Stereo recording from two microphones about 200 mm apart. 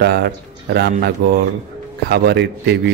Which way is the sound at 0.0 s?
55° right (ahead or behind).